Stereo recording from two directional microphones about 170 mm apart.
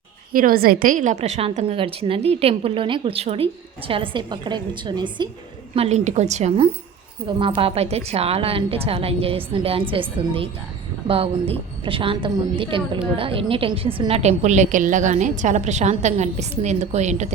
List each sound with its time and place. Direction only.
0.3 s a woman's voice: 60° right (ahead or behind); by 5.3 s 25° right (ahead or behind)
5.7 s a woman's voice: 40° right (ahead or behind)
7.3 s a woman's voice: 30° right (ahead or behind)